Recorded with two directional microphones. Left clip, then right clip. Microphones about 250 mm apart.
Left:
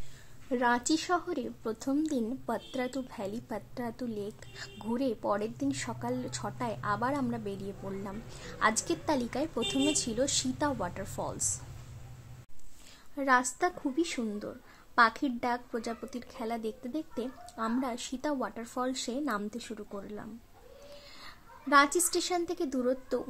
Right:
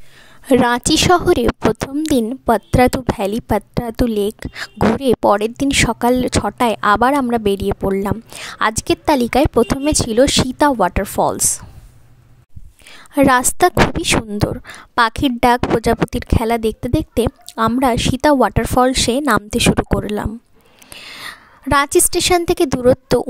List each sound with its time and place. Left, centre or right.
0.5 s a woman's voice: right
12.9 s a woman's voice: right
15.0 s a woman's voice: right